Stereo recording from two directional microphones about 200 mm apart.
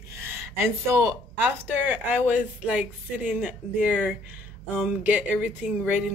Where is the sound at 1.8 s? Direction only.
10° right (ahead or behind).